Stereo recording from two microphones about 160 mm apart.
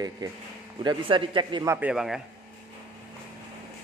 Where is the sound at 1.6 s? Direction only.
15° right (ahead or behind).